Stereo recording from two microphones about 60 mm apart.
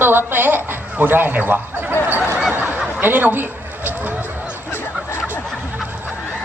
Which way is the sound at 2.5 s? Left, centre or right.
Right.